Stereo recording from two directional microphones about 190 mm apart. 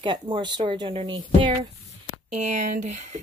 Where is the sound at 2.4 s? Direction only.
40° right (ahead or behind).